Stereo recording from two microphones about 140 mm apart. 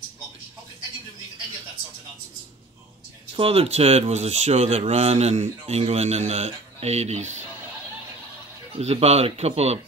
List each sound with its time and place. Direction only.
3.3 s speech: 45° right (ahead or behind)
8.7 s speech: 45° right (ahead or behind)